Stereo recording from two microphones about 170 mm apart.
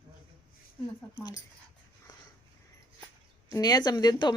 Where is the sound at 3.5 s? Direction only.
20° left (ahead or behind).